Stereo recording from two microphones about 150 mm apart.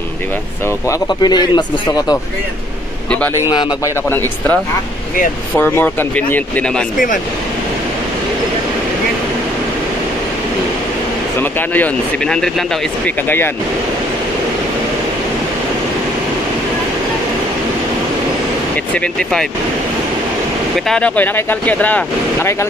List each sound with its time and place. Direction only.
0.8 s a man's voice: 25° left (ahead or behind)
3.4 s a man's voice: 30° left (ahead or behind)
5.6 s speech: 15° left (ahead or behind)
11.3 s speech: 10° left (ahead or behind)
18.9 s speech: 5° left (ahead or behind)
20.7 s speech: 5° left (ahead or behind)